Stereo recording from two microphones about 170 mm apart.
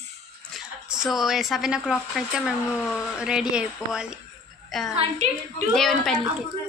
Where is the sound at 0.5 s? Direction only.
Centre (ahead or behind).